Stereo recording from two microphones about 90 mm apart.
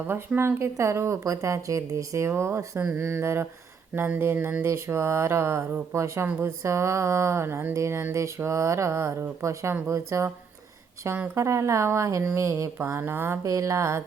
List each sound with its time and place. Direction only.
0.3 s speech: 30° right (ahead or behind)
4.6 s speech: 30° right (ahead or behind)
11.3 s speech: 30° right (ahead or behind)
13.4 s speech: 35° right (ahead or behind)